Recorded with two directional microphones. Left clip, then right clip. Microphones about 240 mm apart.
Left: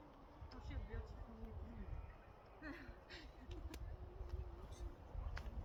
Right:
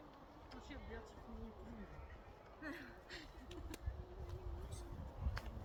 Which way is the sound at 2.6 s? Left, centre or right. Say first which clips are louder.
Right 4 dB; centre.